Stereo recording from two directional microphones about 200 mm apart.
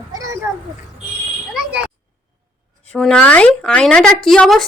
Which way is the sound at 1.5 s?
5° right (ahead or behind).